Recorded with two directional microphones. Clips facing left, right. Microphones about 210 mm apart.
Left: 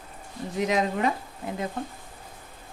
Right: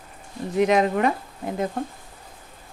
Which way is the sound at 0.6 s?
60° right (ahead or behind).